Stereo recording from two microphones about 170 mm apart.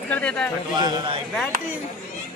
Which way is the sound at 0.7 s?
25° right (ahead or behind).